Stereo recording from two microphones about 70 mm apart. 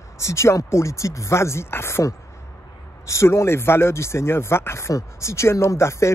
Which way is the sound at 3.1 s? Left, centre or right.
Left.